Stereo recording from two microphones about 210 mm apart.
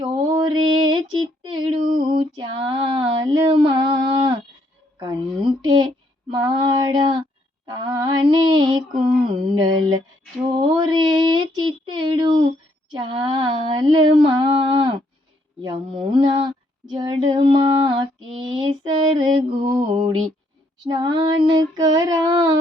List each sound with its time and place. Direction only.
0.0 s mantra: 20° right (ahead or behind)
1.4 s child singing: 20° right (ahead or behind)
2.0 s female singing: 20° right (ahead or behind)
4.9 s a sound: 20° right (ahead or behind)
6.3 s female singing: 25° right (ahead or behind)
10.5 s a sound: 20° right (ahead or behind)
15.6 s female singing: 25° right (ahead or behind)
18.4 s mantra: 20° right (ahead or behind)
20.8 s child singing: 20° right (ahead or behind)